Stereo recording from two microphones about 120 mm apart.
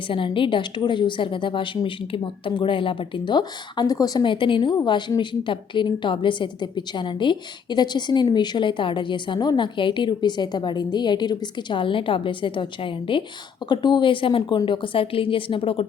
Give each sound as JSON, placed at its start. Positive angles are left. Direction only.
{"t": 0.1, "sound": "a woman's voice", "side_deg": 45}